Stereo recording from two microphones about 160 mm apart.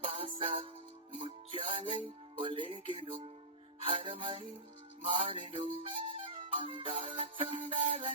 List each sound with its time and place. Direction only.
0.0 s music: 30° right (ahead or behind)